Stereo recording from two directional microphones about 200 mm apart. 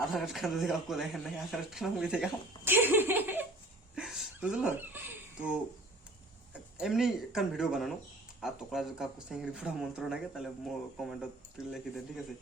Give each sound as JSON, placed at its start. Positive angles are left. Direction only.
{"t": 0.1, "sound": "speech", "side_deg": 0}
{"t": 2.6, "sound": "laughter", "side_deg": -10}
{"t": 3.9, "sound": "a sound", "side_deg": 0}
{"t": 6.5, "sound": "speech", "side_deg": 0}